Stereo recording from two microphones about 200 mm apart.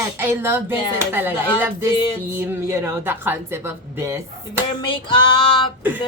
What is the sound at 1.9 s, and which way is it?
Speech, 25° left (ahead or behind).